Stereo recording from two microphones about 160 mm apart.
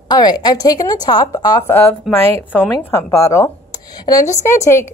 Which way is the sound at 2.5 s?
10° left (ahead or behind).